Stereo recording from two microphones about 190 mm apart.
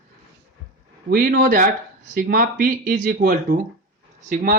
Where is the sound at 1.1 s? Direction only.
50° right (ahead or behind).